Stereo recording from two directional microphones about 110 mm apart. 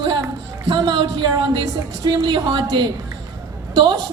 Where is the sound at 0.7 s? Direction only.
45° right (ahead or behind).